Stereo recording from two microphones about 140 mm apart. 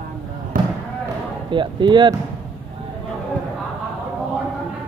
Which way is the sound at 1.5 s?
35° right (ahead or behind).